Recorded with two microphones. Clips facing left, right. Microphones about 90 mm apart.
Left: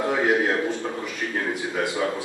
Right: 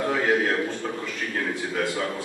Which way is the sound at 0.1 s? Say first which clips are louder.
Left 2 dB; 15° left (ahead or behind).